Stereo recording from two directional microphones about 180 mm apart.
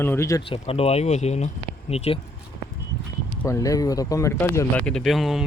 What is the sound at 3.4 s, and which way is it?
Speech, 15° left (ahead or behind).